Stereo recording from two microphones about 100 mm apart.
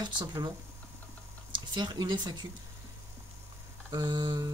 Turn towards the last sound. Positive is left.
turn(degrees=-45)  # may be behind; listen again after turning